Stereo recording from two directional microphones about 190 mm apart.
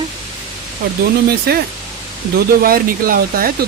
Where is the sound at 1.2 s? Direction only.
55° right (ahead or behind).